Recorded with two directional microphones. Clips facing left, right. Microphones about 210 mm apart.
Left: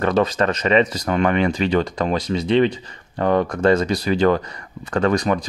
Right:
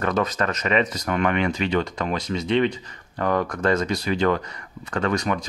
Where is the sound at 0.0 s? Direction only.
30° left (ahead or behind).